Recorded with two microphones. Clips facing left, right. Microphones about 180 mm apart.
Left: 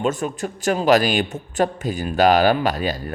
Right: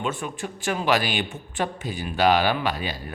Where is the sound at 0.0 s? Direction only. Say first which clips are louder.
Left 6 dB; 40° left (ahead or behind).